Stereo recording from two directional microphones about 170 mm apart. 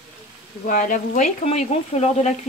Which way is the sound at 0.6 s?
50° left (ahead or behind).